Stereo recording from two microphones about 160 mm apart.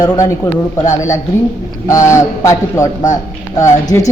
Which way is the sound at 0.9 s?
20° left (ahead or behind).